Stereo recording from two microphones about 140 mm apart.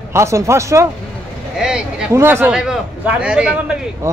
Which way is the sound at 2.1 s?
15° right (ahead or behind).